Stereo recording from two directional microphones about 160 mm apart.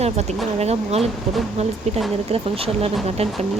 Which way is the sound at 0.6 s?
40° right (ahead or behind).